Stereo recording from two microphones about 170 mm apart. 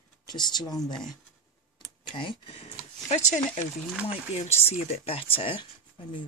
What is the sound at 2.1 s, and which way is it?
Speech, 30° left (ahead or behind).